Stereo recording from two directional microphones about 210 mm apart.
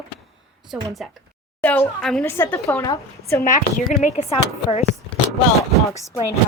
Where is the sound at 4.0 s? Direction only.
30° left (ahead or behind).